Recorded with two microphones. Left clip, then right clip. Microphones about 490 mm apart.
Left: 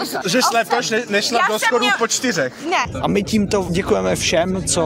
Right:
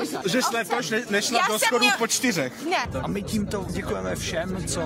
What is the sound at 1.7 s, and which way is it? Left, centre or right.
Speech, right.